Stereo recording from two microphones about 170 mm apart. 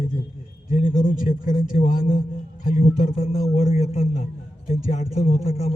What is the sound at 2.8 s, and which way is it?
A man's voice, 40° left (ahead or behind).